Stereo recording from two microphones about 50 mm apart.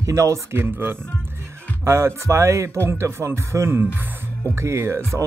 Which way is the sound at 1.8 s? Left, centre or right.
Right.